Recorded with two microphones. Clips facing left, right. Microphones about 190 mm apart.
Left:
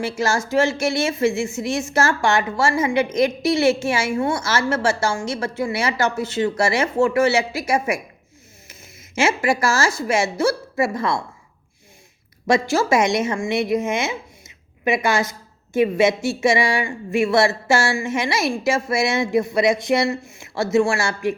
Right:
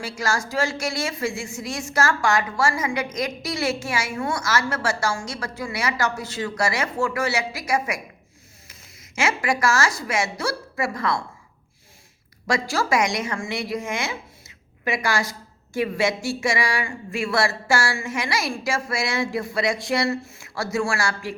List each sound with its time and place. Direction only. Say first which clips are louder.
0.0 s a woman's voice: left 5 dB; 25° left (ahead or behind)
12.5 s speech: left 5 dB; 25° left (ahead or behind)